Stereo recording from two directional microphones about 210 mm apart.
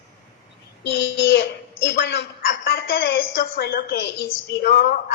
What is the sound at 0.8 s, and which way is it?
A child's voice, 55° left (ahead or behind).